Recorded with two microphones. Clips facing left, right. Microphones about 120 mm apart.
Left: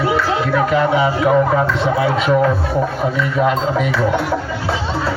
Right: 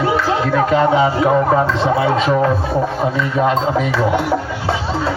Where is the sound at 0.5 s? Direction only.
30° right (ahead or behind).